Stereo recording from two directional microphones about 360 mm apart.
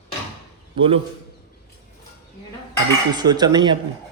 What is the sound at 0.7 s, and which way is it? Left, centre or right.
Speech, centre.